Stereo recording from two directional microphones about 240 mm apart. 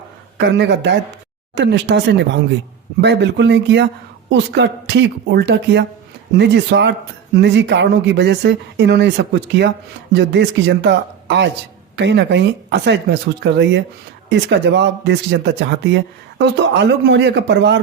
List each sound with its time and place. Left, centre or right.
0.3 s speech: right